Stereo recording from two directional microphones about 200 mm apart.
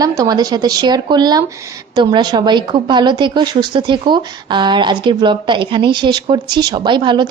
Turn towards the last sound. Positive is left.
turn(degrees=-25)  # may be behind; listen again after turning